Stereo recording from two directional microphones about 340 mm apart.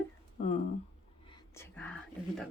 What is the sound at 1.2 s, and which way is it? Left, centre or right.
Whispering, centre.